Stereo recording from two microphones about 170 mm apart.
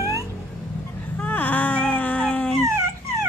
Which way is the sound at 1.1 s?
10° left (ahead or behind).